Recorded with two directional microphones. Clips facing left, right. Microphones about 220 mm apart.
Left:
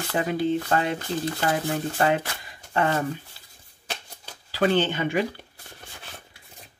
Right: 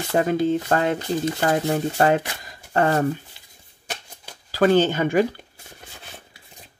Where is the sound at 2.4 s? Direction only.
40° right (ahead or behind).